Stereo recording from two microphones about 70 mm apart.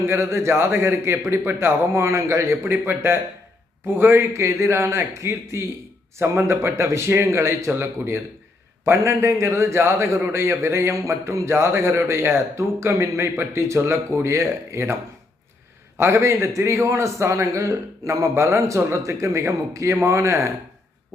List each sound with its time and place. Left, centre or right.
0.0 s a man's voice: right
2.6 s a man's voice: right
16.0 s a man's voice: right